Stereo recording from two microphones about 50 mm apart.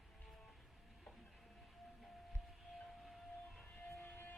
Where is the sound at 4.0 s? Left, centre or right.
Left.